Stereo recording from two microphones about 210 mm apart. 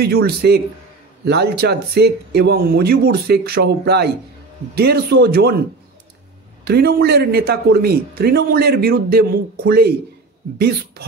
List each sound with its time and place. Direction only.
0.0 s a man's voice: 50° right (ahead or behind)
6.6 s a man's voice: 50° right (ahead or behind)